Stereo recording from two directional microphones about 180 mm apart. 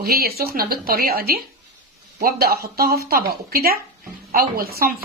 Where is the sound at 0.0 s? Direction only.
60° right (ahead or behind).